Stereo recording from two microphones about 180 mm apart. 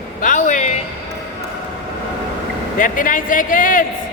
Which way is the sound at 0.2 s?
45° left (ahead or behind).